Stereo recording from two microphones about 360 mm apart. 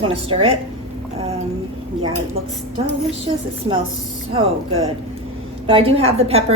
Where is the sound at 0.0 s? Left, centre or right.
Centre.